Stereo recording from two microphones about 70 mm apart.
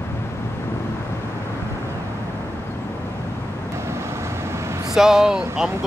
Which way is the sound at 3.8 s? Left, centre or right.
Right.